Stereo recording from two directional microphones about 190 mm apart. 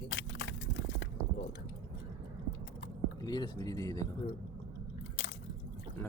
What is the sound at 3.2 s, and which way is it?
Speech, 20° left (ahead or behind).